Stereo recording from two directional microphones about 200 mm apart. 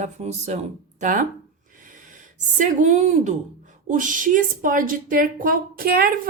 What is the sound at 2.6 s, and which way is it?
Speech, 35° right (ahead or behind).